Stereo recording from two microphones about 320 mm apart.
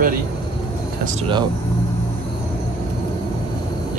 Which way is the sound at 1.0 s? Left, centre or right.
Right.